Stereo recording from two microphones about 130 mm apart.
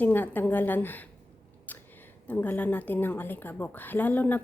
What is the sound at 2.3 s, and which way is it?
A woman's voice, 15° left (ahead or behind).